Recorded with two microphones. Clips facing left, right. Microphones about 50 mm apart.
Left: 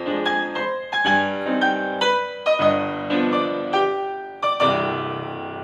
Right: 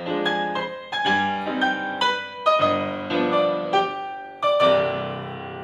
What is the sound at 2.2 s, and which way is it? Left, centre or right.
Music, centre.